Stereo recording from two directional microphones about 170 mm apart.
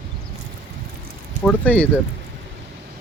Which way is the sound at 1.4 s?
10° left (ahead or behind).